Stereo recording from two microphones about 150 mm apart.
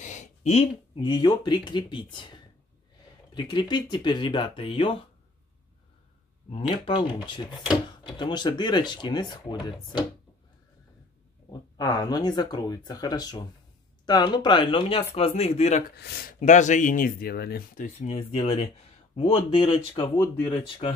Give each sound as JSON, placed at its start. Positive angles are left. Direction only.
{"t": 0.0, "sound": "a sound", "side_deg": 55}
{"t": 0.9, "sound": "speech", "side_deg": 30}
{"t": 6.5, "sound": "speech", "side_deg": 35}
{"t": 11.7, "sound": "speech", "side_deg": 25}
{"t": 16.0, "sound": "speech", "side_deg": 90}
{"t": 16.3, "sound": "speech", "side_deg": 55}
{"t": 18.0, "sound": "speech", "side_deg": 45}